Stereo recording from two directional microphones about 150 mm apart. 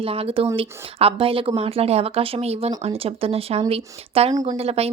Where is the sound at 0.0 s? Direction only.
40° right (ahead or behind).